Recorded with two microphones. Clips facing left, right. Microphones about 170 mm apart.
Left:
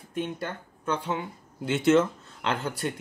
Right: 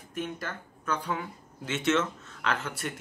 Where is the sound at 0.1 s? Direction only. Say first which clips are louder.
Left 3 dB; 30° left (ahead or behind).